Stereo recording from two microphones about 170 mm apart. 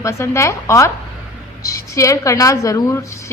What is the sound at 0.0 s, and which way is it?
A woman's voice, 15° left (ahead or behind).